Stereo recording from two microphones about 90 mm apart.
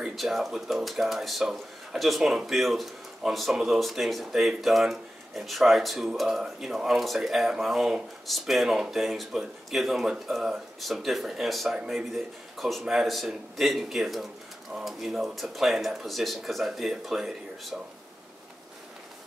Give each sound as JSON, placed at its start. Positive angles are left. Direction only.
{"t": 0.0, "sound": "speech", "side_deg": 0}